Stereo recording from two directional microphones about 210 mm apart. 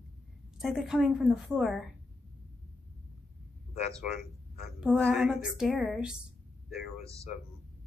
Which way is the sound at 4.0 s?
Centre (ahead or behind).